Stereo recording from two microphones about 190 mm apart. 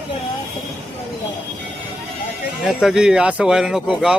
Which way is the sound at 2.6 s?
Centre (ahead or behind).